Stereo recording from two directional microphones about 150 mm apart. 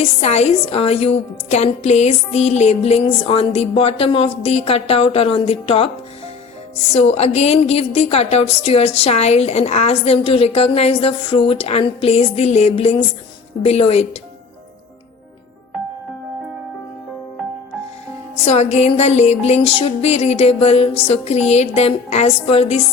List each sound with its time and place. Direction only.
0.0 s a woman's voice: 45° left (ahead or behind)
6.9 s a woman's voice: 45° left (ahead or behind)
18.4 s a woman's voice: 45° left (ahead or behind)